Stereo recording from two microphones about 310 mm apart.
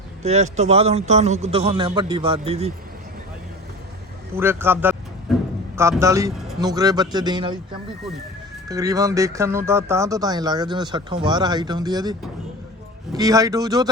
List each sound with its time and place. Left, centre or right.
0.2 s a man's voice: right
4.4 s speech: centre
5.3 s music: centre
5.7 s speech: centre
13.1 s speech: centre